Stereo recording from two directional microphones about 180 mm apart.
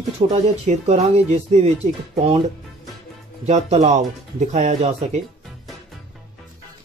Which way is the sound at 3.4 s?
40° right (ahead or behind).